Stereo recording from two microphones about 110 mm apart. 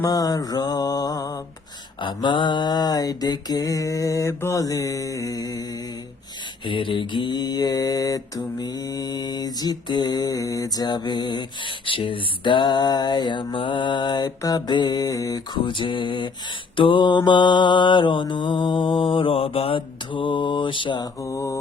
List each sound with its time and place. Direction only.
0.0 s mantra: 35° left (ahead or behind)
2.0 s mantra: 45° left (ahead or behind)
6.7 s mantra: 50° left (ahead or behind)
11.9 s a sound: 50° left (ahead or behind)
21.2 s mantra: 25° left (ahead or behind)